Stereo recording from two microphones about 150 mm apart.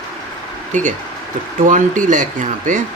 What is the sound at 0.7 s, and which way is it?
Speech, 55° right (ahead or behind).